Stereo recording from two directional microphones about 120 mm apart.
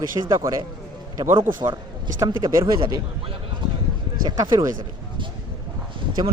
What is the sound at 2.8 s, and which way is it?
Speech, 45° right (ahead or behind).